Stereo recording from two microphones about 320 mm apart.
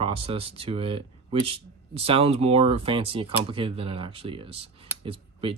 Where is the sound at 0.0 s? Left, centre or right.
Centre.